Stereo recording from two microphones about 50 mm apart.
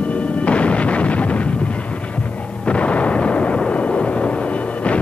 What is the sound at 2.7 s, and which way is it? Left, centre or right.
Artillery fire, left.